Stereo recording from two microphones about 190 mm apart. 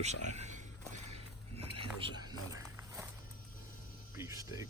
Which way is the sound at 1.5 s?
30° right (ahead or behind).